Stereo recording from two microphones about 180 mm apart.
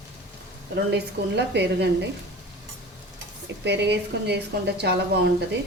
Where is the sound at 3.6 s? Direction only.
70° right (ahead or behind).